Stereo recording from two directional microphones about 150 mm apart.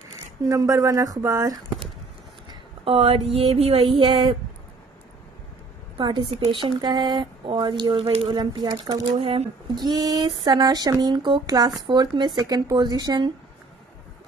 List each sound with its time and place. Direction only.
0.5 s speech: 20° right (ahead or behind)
2.8 s speech: 40° right (ahead or behind)
5.9 s a woman's voice: 30° right (ahead or behind)
9.2 s speech: 35° right (ahead or behind)